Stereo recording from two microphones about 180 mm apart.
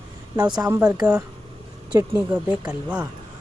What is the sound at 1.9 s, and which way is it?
Speech, 10° right (ahead or behind).